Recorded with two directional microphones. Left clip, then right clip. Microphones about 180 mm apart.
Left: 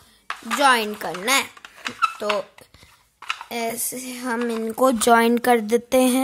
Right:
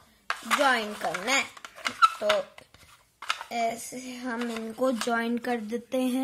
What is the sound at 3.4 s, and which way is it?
Speech, 55° left (ahead or behind).